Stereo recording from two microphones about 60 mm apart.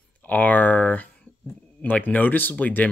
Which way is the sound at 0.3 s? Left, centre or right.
Left.